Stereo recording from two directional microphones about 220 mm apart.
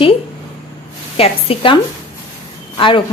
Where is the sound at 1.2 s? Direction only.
25° left (ahead or behind).